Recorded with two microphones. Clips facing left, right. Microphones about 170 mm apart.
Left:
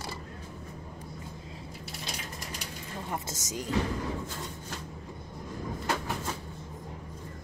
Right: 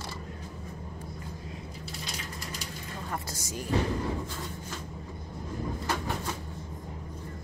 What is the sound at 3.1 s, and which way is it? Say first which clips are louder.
Speech: left 1 dB; 20° left (ahead or behind).